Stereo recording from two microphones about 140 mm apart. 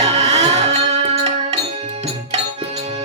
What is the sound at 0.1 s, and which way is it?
Music, 50° right (ahead or behind).